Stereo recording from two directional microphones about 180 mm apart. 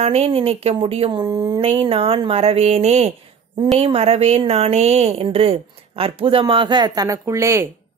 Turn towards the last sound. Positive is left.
turn(degrees=-15)  # may be behind; listen again after turning